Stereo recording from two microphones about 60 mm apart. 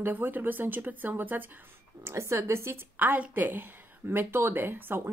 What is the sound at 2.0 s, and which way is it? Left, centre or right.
Speech, right.